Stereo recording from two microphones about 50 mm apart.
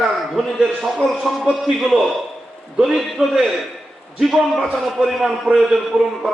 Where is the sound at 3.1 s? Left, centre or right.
Centre.